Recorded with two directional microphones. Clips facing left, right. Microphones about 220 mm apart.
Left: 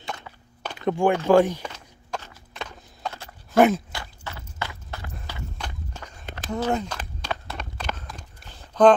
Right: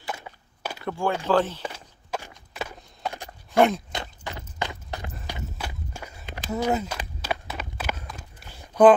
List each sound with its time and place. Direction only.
0.8 s speech: 15° left (ahead or behind)
1.6 s a sound: 10° right (ahead or behind)
3.5 s speech: 5° left (ahead or behind)
3.9 s walk: 20° right (ahead or behind)